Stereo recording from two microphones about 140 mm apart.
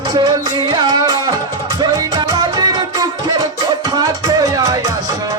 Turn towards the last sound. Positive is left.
turn(degrees=-25)  # may be behind; listen again after turning